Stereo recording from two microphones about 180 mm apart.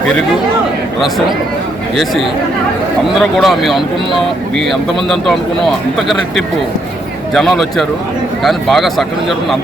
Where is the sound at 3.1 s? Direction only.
Centre (ahead or behind).